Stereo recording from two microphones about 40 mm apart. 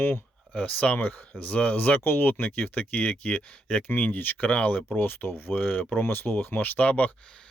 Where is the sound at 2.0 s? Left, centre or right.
Left.